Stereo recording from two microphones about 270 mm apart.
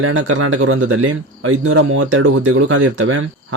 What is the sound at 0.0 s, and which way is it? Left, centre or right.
Speech, right.